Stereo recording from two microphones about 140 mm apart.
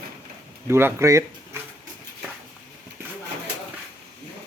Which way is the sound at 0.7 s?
15° right (ahead or behind).